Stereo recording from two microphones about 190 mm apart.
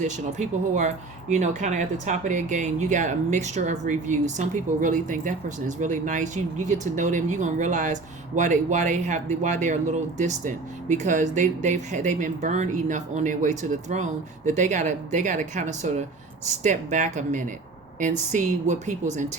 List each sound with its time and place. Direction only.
0.0 s speech: 40° right (ahead or behind)